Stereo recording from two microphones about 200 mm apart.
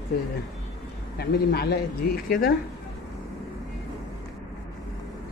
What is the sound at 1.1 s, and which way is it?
Speech, 55° left (ahead or behind).